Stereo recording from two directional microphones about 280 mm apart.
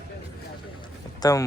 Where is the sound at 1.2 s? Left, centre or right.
Centre.